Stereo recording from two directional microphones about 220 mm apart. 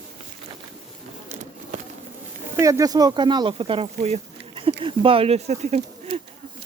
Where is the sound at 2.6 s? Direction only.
15° right (ahead or behind); by 6.2 s 30° right (ahead or behind).